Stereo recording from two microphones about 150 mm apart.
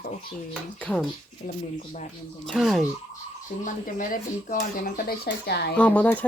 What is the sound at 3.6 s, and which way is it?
Speech, 65° left (ahead or behind).